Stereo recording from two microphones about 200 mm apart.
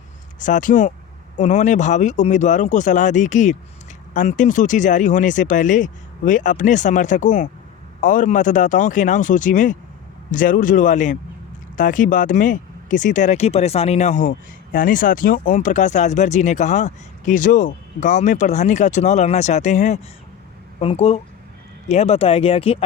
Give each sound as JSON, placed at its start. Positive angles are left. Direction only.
{"t": 0.3, "sound": "speech", "side_deg": 40}